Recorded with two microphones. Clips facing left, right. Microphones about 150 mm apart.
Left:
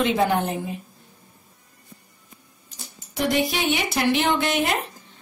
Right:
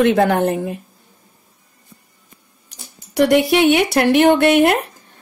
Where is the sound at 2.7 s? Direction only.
75° right (ahead or behind).